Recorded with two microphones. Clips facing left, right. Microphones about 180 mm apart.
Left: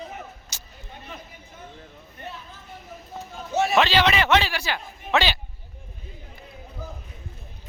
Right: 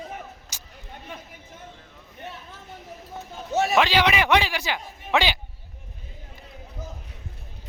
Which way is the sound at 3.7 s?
10° right (ahead or behind).